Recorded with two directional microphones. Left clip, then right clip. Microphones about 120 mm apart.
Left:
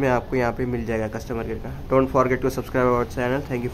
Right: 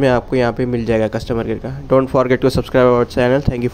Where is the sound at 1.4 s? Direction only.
60° right (ahead or behind).